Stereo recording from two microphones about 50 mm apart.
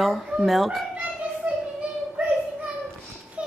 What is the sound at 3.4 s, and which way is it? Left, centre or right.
Dog, right.